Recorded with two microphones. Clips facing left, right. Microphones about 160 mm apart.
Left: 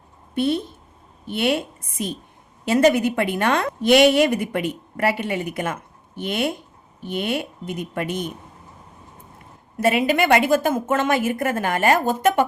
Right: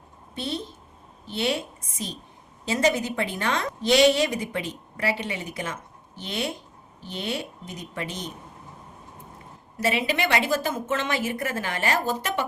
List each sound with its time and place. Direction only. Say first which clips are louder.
0.3 s a woman's voice: left 10 dB; 55° left (ahead or behind)
9.8 s a woman's voice: left 6 dB; 50° left (ahead or behind)